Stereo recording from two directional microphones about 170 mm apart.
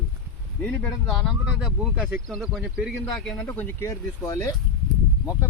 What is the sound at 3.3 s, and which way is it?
Speech, 10° left (ahead or behind).